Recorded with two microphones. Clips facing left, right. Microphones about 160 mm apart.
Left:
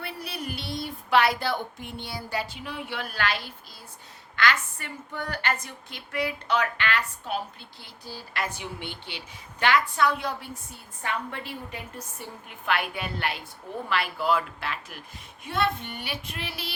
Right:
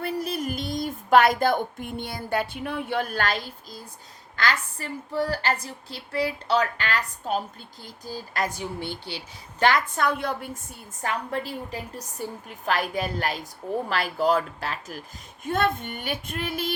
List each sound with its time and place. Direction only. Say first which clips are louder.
0.0 s a woman's voice: right 7 dB; 45° right (ahead or behind)
11.0 s a woman's voice: right 4 dB; 35° right (ahead or behind)